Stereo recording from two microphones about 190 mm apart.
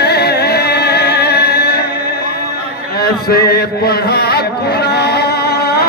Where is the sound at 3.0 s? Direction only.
55° left (ahead or behind).